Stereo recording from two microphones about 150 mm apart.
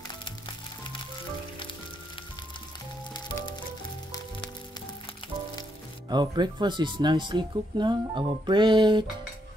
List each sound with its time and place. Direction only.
0.1 s music: 35° left (ahead or behind)
6.0 s speech: 30° right (ahead or behind)